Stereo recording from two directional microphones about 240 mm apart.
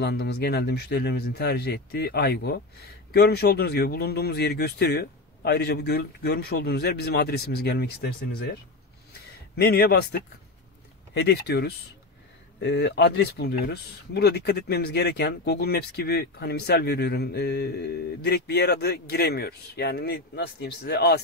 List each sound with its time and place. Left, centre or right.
0.0 s speech: left
9.6 s speech: left
11.1 s speech: left